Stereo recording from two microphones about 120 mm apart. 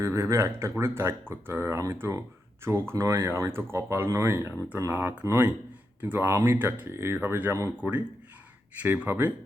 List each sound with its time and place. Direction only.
0.0 s speech: 20° right (ahead or behind)
9.0 s speech: 15° right (ahead or behind)